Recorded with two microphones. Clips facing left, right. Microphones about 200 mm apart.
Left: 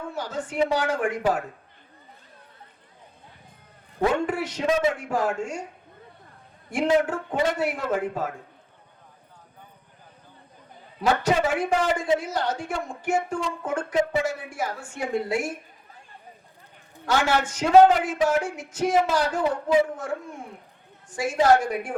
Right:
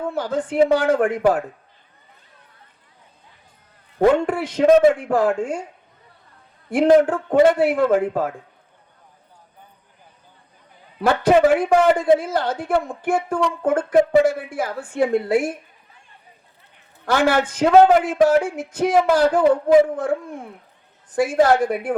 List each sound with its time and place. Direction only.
0.1 s a woman's voice: 55° right (ahead or behind)
4.0 s a woman's voice: 55° right (ahead or behind)
6.7 s a woman's voice: 55° right (ahead or behind)
11.0 s a woman's voice: 55° right (ahead or behind)
17.1 s a woman's voice: 55° right (ahead or behind)
21.2 s a woman's voice: 55° right (ahead or behind)